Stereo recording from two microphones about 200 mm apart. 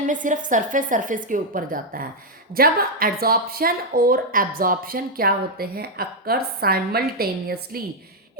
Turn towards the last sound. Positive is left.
turn(degrees=-50)  # may be behind; listen again after turning